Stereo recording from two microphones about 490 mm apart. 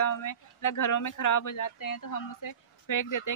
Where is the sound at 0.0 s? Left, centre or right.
Left.